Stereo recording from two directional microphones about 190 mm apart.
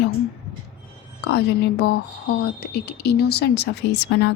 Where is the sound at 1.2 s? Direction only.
60° left (ahead or behind).